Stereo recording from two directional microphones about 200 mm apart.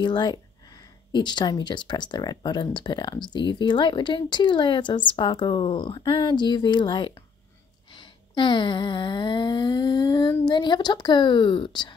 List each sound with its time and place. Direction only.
0.0 s speech: 20° left (ahead or behind)